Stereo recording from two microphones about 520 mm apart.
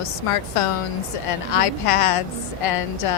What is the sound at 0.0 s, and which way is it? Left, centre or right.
A woman's voice, left.